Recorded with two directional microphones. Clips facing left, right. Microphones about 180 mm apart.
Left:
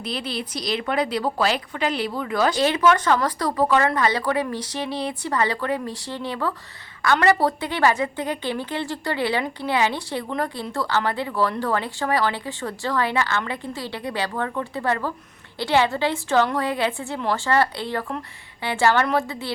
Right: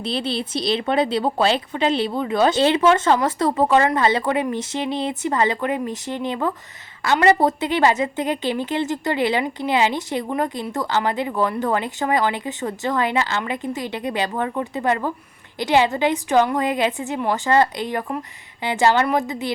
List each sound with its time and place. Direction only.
0.0 s a woman's voice: 25° right (ahead or behind)